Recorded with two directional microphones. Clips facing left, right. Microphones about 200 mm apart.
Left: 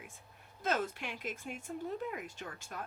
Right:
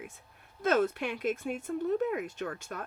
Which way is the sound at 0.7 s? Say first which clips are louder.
Right 8 dB; 60° right (ahead or behind).